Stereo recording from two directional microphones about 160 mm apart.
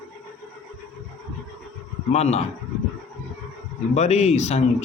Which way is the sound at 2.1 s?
40° left (ahead or behind).